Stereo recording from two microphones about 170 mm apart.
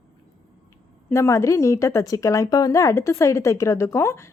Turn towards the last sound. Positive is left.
turn(degrees=15)  # may be behind; listen again after turning